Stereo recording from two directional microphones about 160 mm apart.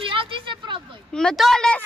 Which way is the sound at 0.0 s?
30° right (ahead or behind).